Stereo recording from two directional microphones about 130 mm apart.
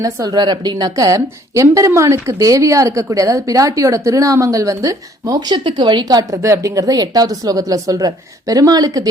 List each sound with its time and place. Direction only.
0.0 s a woman's voice: 30° right (ahead or behind)